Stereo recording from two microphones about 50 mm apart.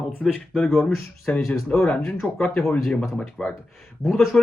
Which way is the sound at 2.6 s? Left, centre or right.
Left.